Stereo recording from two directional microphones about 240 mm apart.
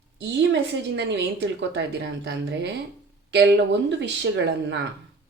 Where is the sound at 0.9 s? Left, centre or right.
Right.